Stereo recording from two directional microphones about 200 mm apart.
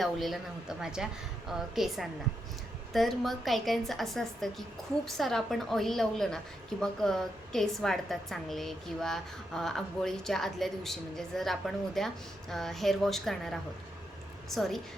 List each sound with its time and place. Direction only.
0.0 s a woman's voice: centre (ahead or behind)